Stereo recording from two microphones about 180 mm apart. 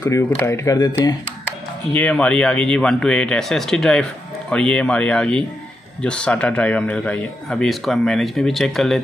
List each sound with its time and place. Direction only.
0.0 s speech: 15° left (ahead or behind)
2.0 s speech: 5° left (ahead or behind)